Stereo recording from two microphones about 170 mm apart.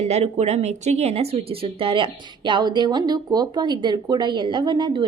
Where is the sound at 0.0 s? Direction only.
40° right (ahead or behind).